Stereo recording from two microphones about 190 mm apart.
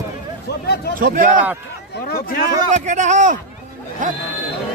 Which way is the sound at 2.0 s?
55° left (ahead or behind).